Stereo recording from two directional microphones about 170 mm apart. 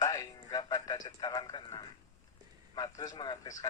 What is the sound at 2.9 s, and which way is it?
Speech, 20° left (ahead or behind).